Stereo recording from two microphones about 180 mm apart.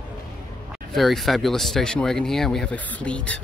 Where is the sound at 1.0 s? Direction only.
Centre (ahead or behind).